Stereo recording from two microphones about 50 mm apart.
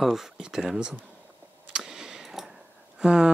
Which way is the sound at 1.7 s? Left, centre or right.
Centre.